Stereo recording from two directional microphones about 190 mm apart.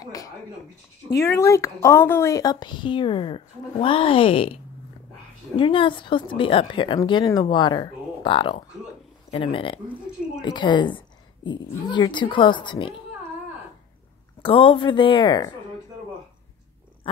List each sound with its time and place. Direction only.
0.0 s a sound: 20° left (ahead or behind)
1.1 s a woman's voice: 15° left (ahead or behind)
5.6 s a woman's voice: 25° left (ahead or behind)
14.4 s a woman's voice: 30° left (ahead or behind)